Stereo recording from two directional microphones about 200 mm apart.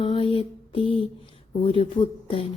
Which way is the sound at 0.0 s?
25° left (ahead or behind).